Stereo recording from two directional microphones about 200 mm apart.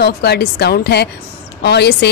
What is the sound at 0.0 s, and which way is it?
Speech, 55° left (ahead or behind).